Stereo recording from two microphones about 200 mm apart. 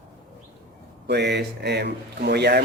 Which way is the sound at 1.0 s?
55° right (ahead or behind).